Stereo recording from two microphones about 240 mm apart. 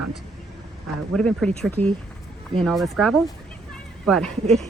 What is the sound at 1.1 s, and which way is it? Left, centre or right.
Speech, centre.